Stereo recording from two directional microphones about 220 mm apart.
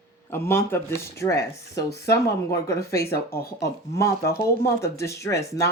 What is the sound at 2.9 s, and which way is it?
Speech, 45° left (ahead or behind).